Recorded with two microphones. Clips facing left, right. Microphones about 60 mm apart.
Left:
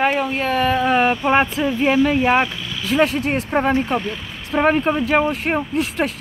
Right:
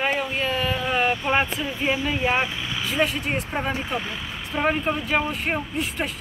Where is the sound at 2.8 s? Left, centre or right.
Left.